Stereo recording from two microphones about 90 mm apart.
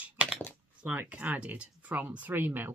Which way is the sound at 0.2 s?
15° right (ahead or behind).